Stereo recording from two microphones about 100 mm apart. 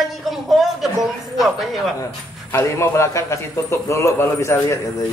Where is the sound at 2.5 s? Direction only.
25° left (ahead or behind).